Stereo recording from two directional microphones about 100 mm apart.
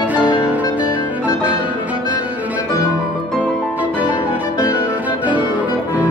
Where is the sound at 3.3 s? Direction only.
5° left (ahead or behind).